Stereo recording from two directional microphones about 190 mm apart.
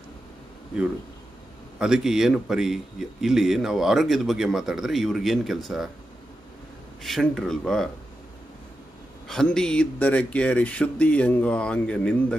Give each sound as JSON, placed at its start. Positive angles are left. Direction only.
{"t": 1.8, "sound": "a man's voice", "side_deg": -5}
{"t": 7.0, "sound": "a man's voice", "side_deg": 0}
{"t": 9.3, "sound": "speech", "side_deg": 5}